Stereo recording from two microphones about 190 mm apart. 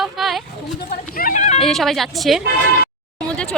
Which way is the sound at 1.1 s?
45° left (ahead or behind).